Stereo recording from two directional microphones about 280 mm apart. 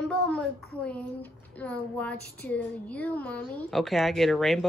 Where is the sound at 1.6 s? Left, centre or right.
Centre.